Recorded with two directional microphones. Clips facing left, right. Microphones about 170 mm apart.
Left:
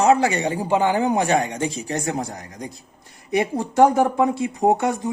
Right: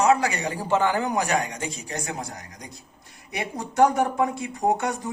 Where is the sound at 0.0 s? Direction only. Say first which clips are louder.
Left 4 dB; 30° left (ahead or behind).